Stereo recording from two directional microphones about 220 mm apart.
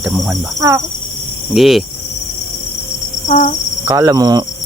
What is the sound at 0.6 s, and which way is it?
Speech, 15° right (ahead or behind).